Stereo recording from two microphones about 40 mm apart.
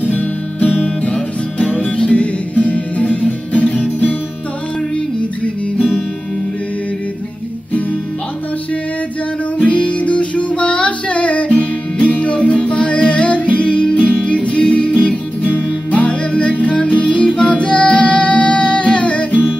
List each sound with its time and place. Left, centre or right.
0.0 s guitar: left
0.8 s music: left
5.4 s guitar: left
9.6 s music: left